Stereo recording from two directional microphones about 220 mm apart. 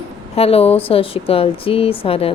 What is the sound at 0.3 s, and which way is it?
A woman's voice, 25° left (ahead or behind).